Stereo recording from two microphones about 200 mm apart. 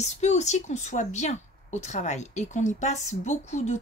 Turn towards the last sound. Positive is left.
turn(degrees=35)  # may be behind; listen again after turning